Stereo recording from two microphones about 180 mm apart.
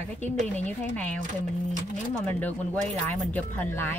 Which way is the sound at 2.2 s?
10° left (ahead or behind).